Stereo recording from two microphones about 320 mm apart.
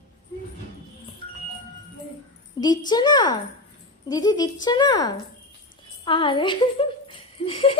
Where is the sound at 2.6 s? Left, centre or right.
Centre.